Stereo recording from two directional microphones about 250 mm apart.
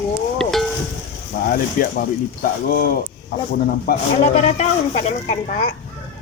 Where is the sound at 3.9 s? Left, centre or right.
Left.